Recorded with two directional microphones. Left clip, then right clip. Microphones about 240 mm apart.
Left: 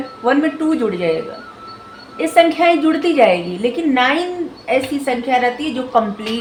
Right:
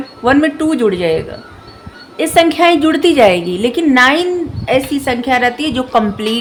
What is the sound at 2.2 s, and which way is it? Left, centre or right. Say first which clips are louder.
A woman's voice: right 2 dB; right.